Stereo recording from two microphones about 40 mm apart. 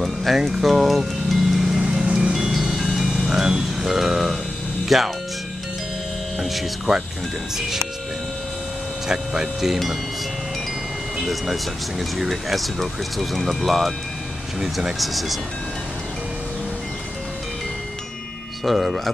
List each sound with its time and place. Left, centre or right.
0.0 s music: centre
2.0 s music: right
2.3 s music: centre
4.8 s speech: centre
9.0 s speech: centre
11.1 s speech: centre
15.0 s speech: centre
18.6 s speech: centre